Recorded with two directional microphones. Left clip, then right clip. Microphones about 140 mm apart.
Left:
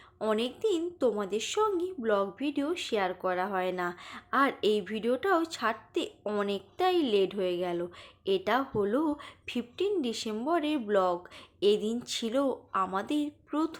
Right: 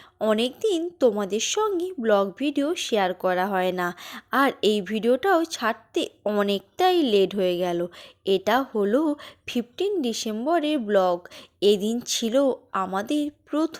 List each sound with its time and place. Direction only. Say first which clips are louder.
0.2 s a woman's voice: right 7 dB; 50° right (ahead or behind)